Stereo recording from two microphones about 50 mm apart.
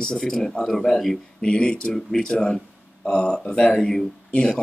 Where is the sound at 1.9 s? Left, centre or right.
Centre.